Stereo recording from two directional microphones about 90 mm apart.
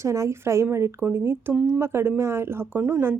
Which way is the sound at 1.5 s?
10° right (ahead or behind).